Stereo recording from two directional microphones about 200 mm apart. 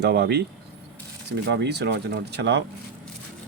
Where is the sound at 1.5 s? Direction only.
55° right (ahead or behind).